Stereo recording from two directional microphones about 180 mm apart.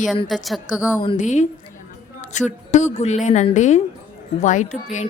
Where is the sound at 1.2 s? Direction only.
40° left (ahead or behind).